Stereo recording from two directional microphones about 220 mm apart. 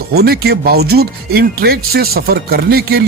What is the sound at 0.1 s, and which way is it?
Speech, 45° right (ahead or behind).